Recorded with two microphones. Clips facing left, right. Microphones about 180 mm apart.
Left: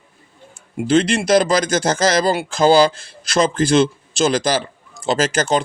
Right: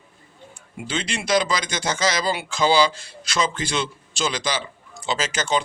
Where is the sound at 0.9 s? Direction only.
50° left (ahead or behind).